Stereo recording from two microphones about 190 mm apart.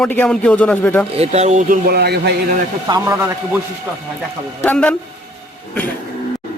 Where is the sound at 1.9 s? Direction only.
60° right (ahead or behind).